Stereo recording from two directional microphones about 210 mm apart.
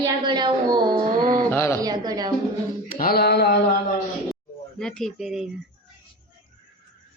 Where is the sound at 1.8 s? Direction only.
20° right (ahead or behind).